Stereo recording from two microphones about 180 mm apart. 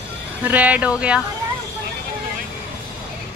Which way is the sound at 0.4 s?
10° right (ahead or behind).